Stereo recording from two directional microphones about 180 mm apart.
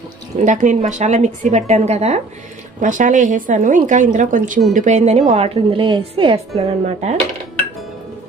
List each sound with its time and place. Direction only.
0.4 s a woman's voice: 45° right (ahead or behind)